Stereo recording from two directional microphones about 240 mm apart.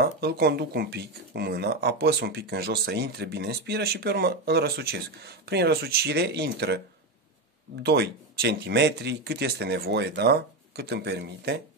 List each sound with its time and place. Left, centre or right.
0.0 s speech: right
7.8 s speech: right